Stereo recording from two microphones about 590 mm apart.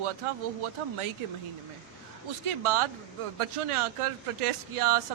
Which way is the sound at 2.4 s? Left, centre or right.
Right.